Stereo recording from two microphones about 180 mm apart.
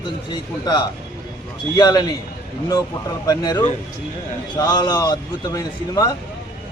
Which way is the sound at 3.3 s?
20° left (ahead or behind).